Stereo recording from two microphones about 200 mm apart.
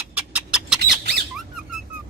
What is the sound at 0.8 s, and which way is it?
Squeak, 55° right (ahead or behind).